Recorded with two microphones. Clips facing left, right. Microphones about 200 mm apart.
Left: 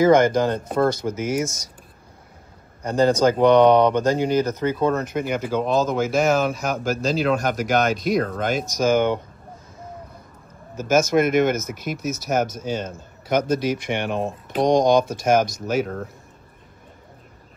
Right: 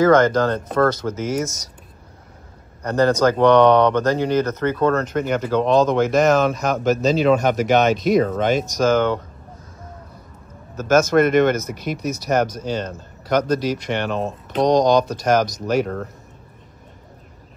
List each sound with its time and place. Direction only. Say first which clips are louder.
0.0 s speech: right 1 dB; 10° left (ahead or behind)
2.8 s speech: right 1 dB; 10° left (ahead or behind)
8.5 s speech: left 2 dB; 10° left (ahead or behind)
10.8 s speech: right 3 dB; 10° left (ahead or behind)
11.7 s speech: right 2 dB; 45° left (ahead or behind)
12.0 s a man's voice: right 3 dB; 5° left (ahead or behind)
14.7 s speech: right 1 dB; 50° left (ahead or behind)
15.0 s speech: right 1 dB; 5° left (ahead or behind)